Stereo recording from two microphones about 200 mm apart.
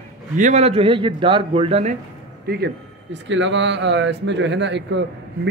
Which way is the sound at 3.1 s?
65° right (ahead or behind).